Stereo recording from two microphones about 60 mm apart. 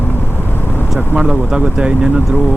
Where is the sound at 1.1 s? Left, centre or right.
Centre.